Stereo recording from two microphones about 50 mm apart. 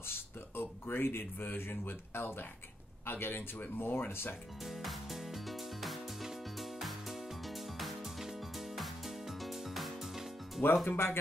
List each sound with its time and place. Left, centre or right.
0.0 s speech: left
4.6 s music: centre
10.9 s speech: left